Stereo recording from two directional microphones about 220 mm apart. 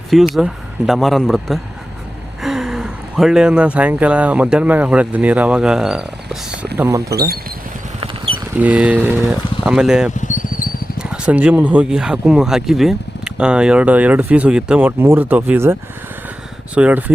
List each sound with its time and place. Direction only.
0.1 s speech: centre (ahead or behind)
7.1 s speech: 45° right (ahead or behind)
8.0 s a sound: 25° right (ahead or behind)
8.5 s speech: 5° right (ahead or behind)
10.2 s a sound: 35° left (ahead or behind)
10.9 s speech: 5° right (ahead or behind)